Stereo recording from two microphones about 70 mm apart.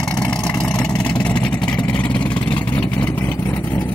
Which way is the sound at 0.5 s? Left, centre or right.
Centre.